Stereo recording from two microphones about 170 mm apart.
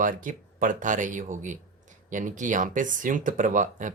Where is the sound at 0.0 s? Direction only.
50° right (ahead or behind).